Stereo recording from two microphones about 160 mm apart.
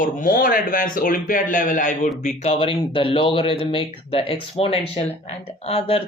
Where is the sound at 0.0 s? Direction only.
60° left (ahead or behind).